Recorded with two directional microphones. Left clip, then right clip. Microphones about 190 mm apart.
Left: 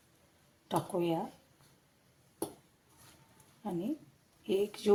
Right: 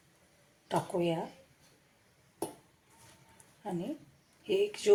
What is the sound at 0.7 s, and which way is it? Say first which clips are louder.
Speech: right 1 dB; 75° left (ahead or behind).